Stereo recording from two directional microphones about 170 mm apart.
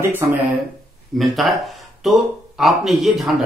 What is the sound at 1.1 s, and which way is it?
Speech, centre (ahead or behind).